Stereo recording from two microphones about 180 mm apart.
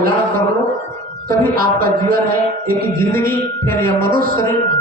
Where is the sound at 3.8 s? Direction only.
55° right (ahead or behind).